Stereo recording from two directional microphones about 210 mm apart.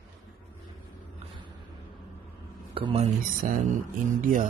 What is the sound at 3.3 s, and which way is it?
Speech, 40° right (ahead or behind).